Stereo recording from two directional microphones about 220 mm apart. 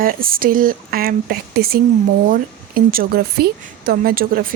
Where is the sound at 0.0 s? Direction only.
40° right (ahead or behind).